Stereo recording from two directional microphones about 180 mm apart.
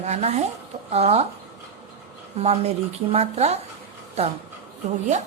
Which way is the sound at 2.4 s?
35° right (ahead or behind).